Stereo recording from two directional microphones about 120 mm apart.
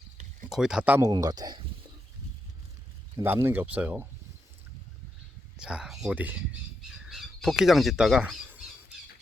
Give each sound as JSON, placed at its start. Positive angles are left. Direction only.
{"t": 0.5, "sound": "speech", "side_deg": -5}
{"t": 1.1, "sound": "speech", "side_deg": -35}
{"t": 3.2, "sound": "speech", "side_deg": -20}
{"t": 5.5, "sound": "speech", "side_deg": -5}
{"t": 7.0, "sound": "speech", "side_deg": 0}
{"t": 8.4, "sound": "squawk", "side_deg": -5}